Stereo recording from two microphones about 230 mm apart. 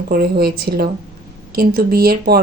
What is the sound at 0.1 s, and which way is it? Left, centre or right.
Speech, right.